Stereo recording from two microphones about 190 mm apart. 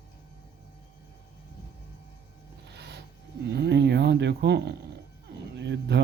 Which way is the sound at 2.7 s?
60° right (ahead or behind).